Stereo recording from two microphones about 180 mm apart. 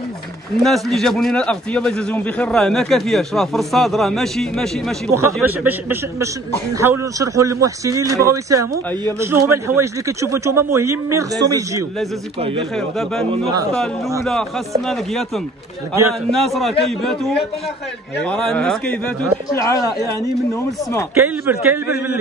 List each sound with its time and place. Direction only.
0.7 s a man's voice: centre (ahead or behind)
5.1 s speech: 15° right (ahead or behind)
12.7 s a man's voice: centre (ahead or behind)
14.9 s a man's voice: centre (ahead or behind)
19.5 s speech: 20° left (ahead or behind)
21.2 s speech: 10° right (ahead or behind)